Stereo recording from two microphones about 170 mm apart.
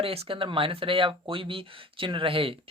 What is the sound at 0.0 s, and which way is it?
Speech, 35° right (ahead or behind).